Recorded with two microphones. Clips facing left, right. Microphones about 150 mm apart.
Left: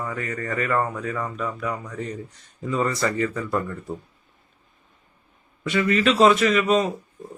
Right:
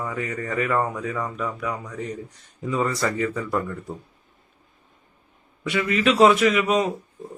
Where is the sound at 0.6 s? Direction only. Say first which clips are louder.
Right 1 dB; 10° right (ahead or behind).